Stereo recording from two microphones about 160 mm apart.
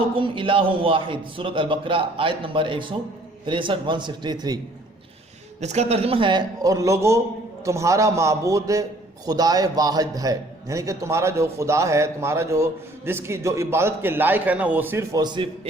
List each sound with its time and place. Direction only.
0.2 s a man's voice: 35° right (ahead or behind)
5.5 s a man's voice: 45° right (ahead or behind); by 15.4 s 25° right (ahead or behind)